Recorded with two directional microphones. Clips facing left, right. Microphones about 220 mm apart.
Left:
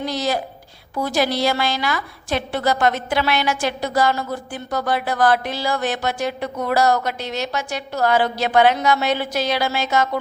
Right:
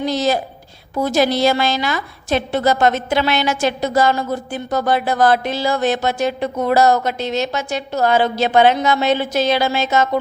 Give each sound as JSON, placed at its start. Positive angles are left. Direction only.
{"t": 0.0, "sound": "a woman's voice", "side_deg": -25}